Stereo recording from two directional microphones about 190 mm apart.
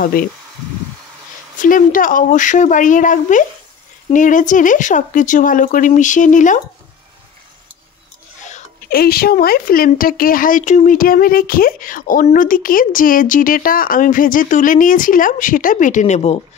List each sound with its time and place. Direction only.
0.0 s speech: 50° left (ahead or behind)
1.6 s speech: 45° left (ahead or behind)
8.4 s a sound: 40° left (ahead or behind)
8.9 s speech: 55° left (ahead or behind); by 16.3 s 35° left (ahead or behind)